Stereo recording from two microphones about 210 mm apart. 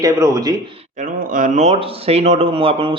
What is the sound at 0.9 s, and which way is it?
Speech, 40° right (ahead or behind).